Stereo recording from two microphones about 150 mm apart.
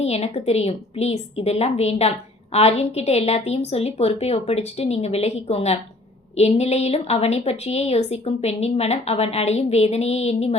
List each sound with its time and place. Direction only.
0.0 s a woman's voice: 40° left (ahead or behind)